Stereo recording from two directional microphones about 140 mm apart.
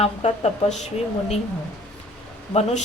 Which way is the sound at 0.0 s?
45° left (ahead or behind).